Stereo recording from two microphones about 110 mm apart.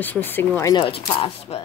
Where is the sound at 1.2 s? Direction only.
50° left (ahead or behind).